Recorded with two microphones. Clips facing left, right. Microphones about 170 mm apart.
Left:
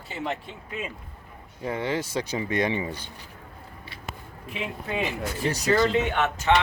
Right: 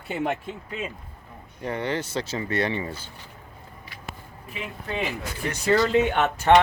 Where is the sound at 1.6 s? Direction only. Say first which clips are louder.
Even; 10° left (ahead or behind).